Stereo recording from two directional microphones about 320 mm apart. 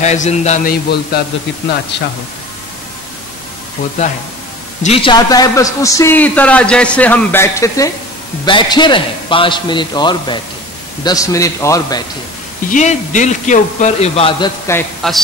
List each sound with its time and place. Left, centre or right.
0.0 s a man's voice: left
4.8 s a man's voice: centre
12.6 s a man's voice: left; by 15.1 s centre